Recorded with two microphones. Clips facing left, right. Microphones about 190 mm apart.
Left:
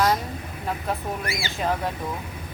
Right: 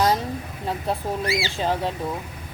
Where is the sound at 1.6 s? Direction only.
30° right (ahead or behind).